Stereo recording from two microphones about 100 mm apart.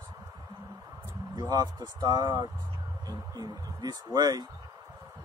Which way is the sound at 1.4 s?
40° right (ahead or behind).